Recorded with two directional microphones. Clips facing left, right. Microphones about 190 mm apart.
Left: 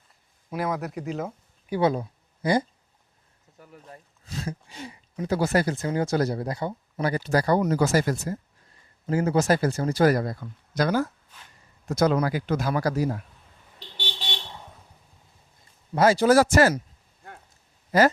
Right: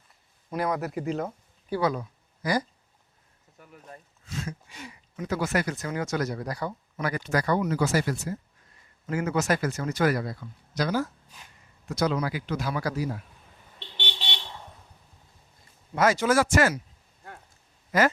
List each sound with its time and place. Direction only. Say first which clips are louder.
0.5 s speech: even; centre (ahead or behind)
1.7 s speech: left 3 dB; 25° left (ahead or behind)
10.8 s speech: left 3 dB; 55° left (ahead or behind)
16.0 s speech: left 4 dB; 35° left (ahead or behind)
17.9 s speech: left 4 dB; 30° left (ahead or behind)